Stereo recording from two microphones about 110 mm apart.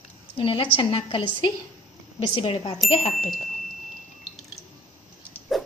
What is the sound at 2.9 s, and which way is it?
Speech, 75° left (ahead or behind).